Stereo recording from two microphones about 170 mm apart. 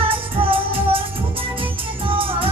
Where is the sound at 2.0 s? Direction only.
30° right (ahead or behind).